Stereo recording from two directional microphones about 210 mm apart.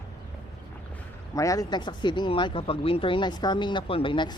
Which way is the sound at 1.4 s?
15° left (ahead or behind).